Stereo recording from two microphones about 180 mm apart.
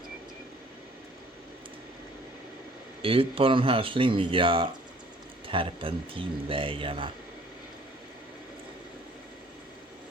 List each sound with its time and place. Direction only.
3.0 s speech: 30° right (ahead or behind)